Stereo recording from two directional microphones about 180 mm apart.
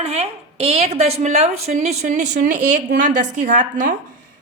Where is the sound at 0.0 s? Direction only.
35° right (ahead or behind).